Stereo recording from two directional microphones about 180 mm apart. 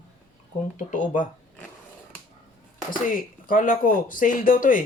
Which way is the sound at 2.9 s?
50° left (ahead or behind).